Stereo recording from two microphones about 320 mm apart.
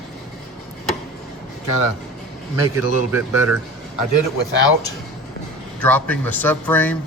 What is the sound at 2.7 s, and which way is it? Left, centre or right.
Speech, centre.